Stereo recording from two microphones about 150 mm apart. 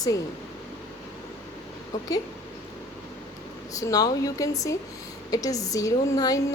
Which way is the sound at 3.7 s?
25° left (ahead or behind).